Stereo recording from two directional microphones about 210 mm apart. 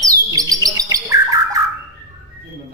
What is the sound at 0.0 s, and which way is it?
Bird, 15° right (ahead or behind).